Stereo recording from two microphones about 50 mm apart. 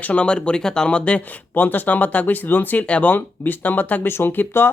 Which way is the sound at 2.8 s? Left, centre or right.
Left.